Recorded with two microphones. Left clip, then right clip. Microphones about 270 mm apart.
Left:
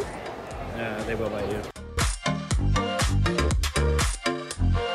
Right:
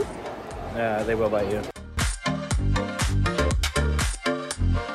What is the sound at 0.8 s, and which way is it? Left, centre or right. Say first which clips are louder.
Speech: right 6 dB; right.